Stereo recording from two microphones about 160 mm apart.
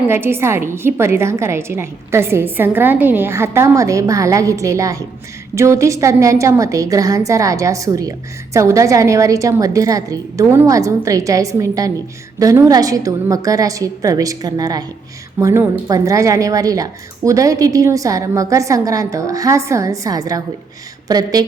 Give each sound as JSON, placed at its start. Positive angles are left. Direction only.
{"t": 0.1, "sound": "a woman's voice", "side_deg": -15}